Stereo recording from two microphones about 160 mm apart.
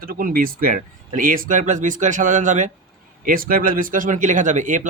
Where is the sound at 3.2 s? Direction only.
60° right (ahead or behind).